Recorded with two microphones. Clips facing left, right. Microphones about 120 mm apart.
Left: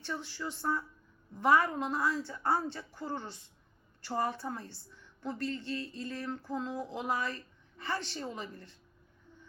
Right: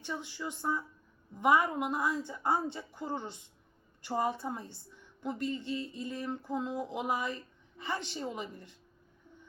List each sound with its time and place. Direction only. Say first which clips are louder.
0.0 s a woman's voice: even; 15° right (ahead or behind)